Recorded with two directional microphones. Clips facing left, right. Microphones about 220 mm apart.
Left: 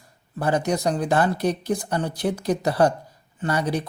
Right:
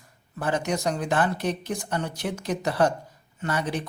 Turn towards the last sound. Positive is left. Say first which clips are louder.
# left 4 dB
turn(degrees=35)  # may be behind; listen again after turning